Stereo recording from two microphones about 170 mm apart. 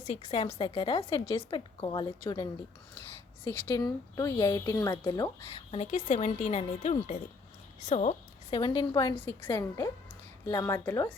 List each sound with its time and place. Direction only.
0.0 s a woman's voice: 40° left (ahead or behind)
3.8 s a woman's voice: 20° left (ahead or behind)
5.5 s a woman's voice: 35° left (ahead or behind)
9.1 s a woman's voice: 10° left (ahead or behind)